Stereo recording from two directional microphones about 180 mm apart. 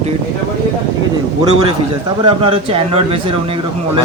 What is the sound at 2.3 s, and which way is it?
Speech, 30° right (ahead or behind).